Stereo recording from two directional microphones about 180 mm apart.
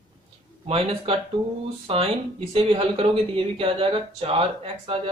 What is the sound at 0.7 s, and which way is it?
Speech, 30° right (ahead or behind).